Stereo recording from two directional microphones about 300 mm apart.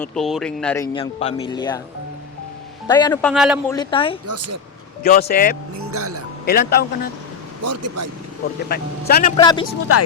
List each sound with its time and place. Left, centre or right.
0.0 s speech: centre
0.9 s speech: centre
2.8 s speech: centre
3.7 s speech: centre
4.3 s speech: right
5.0 s speech: left
5.9 s speech: right
6.4 s speech: left
7.6 s speech: right
8.7 s speech: left
9.3 s speech: centre
9.9 s speech: left